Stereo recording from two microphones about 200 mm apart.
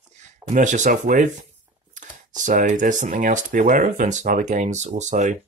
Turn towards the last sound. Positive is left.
turn(degrees=-35)  # may be behind; listen again after turning